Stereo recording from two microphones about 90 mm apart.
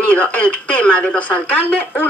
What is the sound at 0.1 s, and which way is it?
A woman's voice, 15° left (ahead or behind).